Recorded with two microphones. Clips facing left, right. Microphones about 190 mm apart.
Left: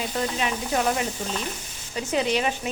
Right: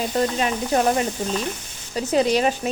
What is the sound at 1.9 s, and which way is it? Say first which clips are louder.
Speech: right 5 dB; 40° right (ahead or behind).